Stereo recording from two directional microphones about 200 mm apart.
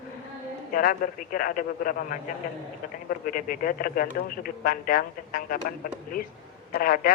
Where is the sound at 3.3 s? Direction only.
45° left (ahead or behind).